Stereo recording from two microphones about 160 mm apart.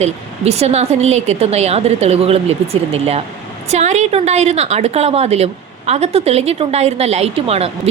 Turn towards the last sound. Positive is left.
turn(degrees=-40)  # may be behind; listen again after turning